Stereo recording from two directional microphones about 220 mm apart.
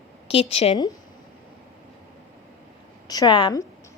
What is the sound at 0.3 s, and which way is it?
Speech, 25° left (ahead or behind).